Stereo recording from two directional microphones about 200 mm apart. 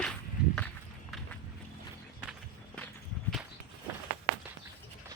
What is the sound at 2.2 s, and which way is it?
Music, centre (ahead or behind).